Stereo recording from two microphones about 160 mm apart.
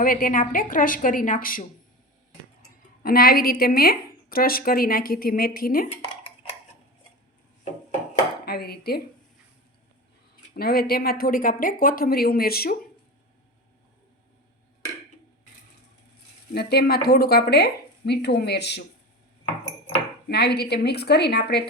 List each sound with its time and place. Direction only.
0.0 s a woman's voice: 60° left (ahead or behind)
3.0 s a woman's voice: 70° left (ahead or behind)
8.4 s speech: 80° left
10.5 s a woman's voice: 75° left (ahead or behind)
16.6 s speech: 80° left
20.2 s speech: 90° left